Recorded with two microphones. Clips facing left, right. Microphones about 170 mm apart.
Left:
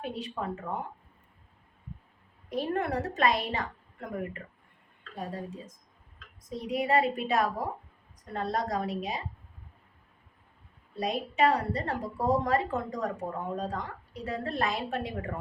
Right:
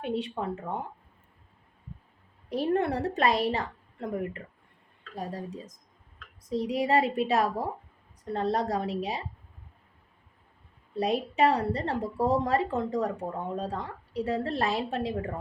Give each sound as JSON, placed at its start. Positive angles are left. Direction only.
{"t": 0.0, "sound": "a woman's voice", "side_deg": -30}
{"t": 2.5, "sound": "a woman's voice", "side_deg": -30}
{"t": 10.9, "sound": "a woman's voice", "side_deg": -30}